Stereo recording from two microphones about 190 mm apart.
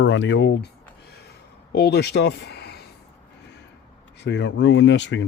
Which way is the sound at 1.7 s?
60° left (ahead or behind).